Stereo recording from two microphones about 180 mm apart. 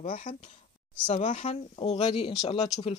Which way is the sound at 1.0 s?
35° left (ahead or behind).